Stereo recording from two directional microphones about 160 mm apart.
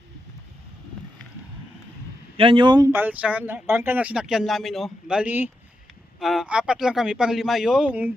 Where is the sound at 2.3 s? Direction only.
35° right (ahead or behind).